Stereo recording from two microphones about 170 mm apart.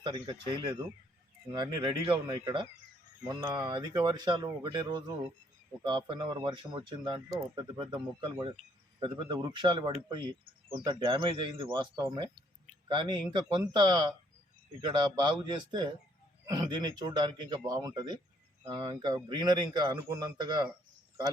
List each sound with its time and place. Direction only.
0.0 s speech: 30° right (ahead or behind)